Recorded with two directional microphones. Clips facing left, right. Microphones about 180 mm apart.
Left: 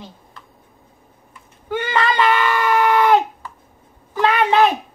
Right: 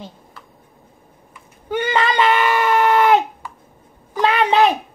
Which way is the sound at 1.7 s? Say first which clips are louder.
Right 1 dB; 20° right (ahead or behind).